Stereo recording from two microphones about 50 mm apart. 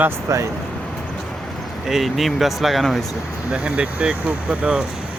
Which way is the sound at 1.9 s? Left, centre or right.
Centre.